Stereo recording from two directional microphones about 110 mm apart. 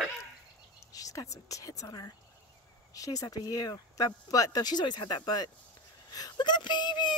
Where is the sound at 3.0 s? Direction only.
30° left (ahead or behind).